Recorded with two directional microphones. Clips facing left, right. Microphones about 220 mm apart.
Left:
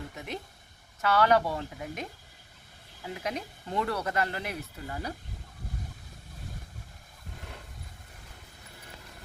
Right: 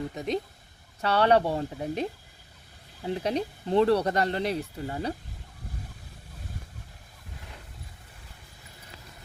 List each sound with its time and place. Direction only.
0.1 s speech: 35° right (ahead or behind)